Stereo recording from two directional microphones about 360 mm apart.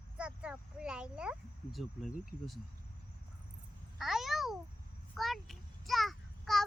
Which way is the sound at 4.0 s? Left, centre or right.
Centre.